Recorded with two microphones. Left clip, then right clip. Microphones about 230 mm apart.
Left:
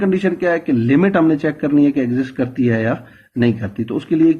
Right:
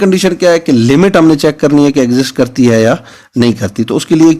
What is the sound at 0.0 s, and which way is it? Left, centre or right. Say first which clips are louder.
Speech: right 8 dB; right.